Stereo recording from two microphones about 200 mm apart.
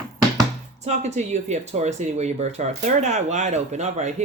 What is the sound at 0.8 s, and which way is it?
Speech, 35° right (ahead or behind).